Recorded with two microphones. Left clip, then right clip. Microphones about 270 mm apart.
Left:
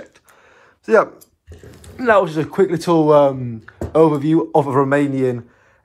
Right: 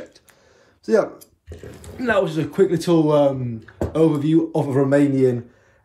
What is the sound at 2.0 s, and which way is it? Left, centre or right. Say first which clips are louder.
Speech: left 5 dB; centre.